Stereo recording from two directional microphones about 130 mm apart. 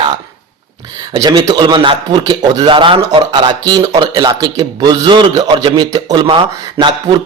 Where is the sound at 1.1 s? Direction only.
35° right (ahead or behind).